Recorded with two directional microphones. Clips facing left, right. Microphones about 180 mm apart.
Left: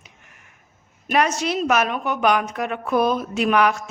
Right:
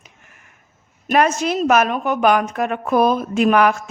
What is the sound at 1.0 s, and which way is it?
A woman's voice, 50° right (ahead or behind).